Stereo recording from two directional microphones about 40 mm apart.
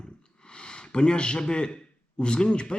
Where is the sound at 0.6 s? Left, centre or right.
Left.